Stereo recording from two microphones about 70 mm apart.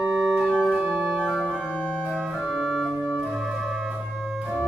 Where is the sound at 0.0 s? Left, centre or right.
Centre.